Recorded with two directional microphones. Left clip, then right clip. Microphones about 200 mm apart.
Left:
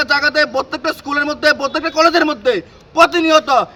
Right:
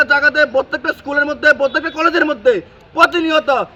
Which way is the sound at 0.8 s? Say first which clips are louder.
Right 1 dB; 15° left (ahead or behind).